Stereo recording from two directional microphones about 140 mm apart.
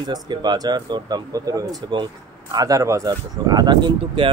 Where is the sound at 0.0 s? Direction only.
30° right (ahead or behind).